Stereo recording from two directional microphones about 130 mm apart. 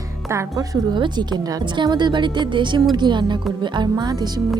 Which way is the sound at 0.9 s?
35° right (ahead or behind).